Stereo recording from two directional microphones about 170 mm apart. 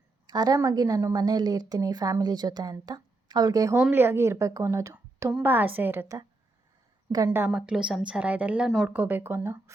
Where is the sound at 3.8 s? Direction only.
10° right (ahead or behind).